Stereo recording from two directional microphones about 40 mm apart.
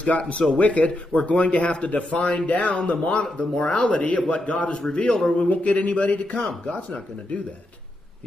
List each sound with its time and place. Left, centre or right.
0.0 s a man's voice: left
5.4 s a man's voice: left